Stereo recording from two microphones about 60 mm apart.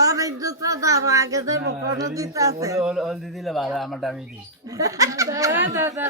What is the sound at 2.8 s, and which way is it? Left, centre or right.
A man's voice, centre.